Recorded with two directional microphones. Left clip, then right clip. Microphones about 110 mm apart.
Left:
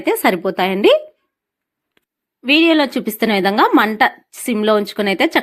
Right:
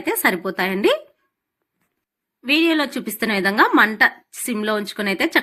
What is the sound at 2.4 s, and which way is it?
Speech, 40° left (ahead or behind).